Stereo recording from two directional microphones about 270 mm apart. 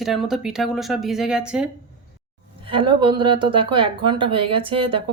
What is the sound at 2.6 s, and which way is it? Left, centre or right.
Speech, centre.